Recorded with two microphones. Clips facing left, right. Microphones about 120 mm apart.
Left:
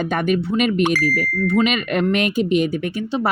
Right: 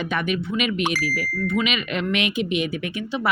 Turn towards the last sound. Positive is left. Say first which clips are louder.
# left 4 dB
turn(degrees=40)  # may be behind; listen again after turning